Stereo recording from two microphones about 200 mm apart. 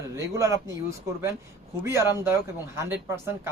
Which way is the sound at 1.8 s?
15° right (ahead or behind).